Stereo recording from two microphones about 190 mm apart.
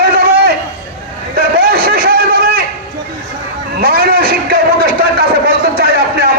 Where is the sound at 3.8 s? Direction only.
55° right (ahead or behind).